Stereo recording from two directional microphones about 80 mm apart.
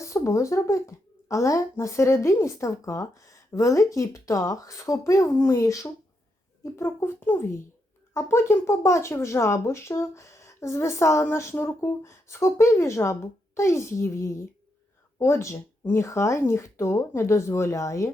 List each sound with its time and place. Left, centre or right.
0.0 s speech: left